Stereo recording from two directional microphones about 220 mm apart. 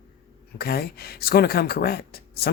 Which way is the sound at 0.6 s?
45° left (ahead or behind).